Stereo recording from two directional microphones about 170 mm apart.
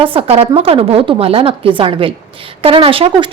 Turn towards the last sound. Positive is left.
turn(degrees=-30)  # may be behind; listen again after turning